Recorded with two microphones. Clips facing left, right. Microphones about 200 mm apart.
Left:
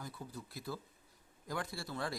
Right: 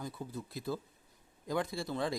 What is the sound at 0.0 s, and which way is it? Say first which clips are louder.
Speech: right 5 dB; 25° right (ahead or behind).